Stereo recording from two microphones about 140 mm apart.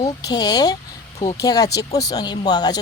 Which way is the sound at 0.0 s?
30° left (ahead or behind).